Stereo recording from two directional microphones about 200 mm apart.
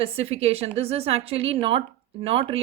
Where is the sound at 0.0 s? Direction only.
30° right (ahead or behind).